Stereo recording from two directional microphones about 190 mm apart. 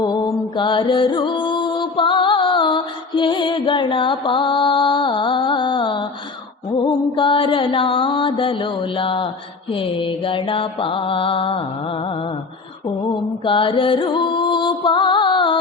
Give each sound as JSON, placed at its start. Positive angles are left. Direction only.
{"t": 0.0, "sound": "music", "side_deg": 25}
{"t": 6.7, "sound": "mantra", "side_deg": 25}
{"t": 13.4, "sound": "music", "side_deg": 25}